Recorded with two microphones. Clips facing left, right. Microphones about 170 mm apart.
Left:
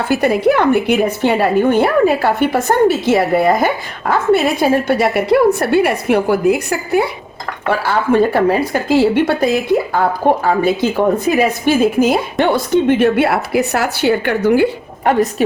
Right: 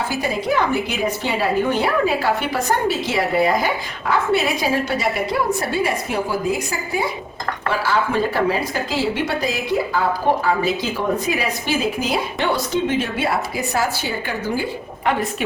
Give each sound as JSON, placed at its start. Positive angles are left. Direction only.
{"t": 0.1, "sound": "speech", "side_deg": 60}
{"t": 15.0, "sound": "a woman's voice", "side_deg": 40}